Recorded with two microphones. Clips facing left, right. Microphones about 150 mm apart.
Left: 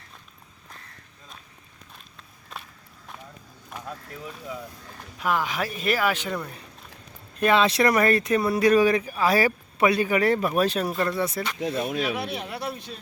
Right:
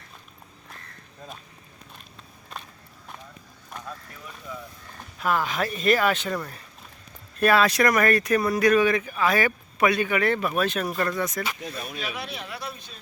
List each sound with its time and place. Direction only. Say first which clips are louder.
2.5 s walk: right 1 dB; centre (ahead or behind)
5.2 s speech: right 1 dB; 15° left (ahead or behind); by 11.4 s 30° left (ahead or behind)
11.8 s speech: left 7 dB; 65° left (ahead or behind)